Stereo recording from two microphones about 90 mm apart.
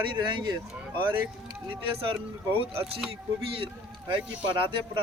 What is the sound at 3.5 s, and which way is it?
Speech, 80° right.